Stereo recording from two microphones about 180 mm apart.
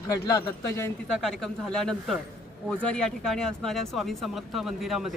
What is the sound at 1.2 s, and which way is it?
Speech, 5° left (ahead or behind).